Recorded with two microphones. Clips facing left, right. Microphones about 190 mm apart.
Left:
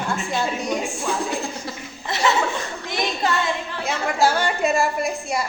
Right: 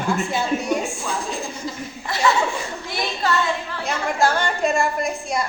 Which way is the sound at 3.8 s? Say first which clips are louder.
Left 1 dB; 5° left (ahead or behind).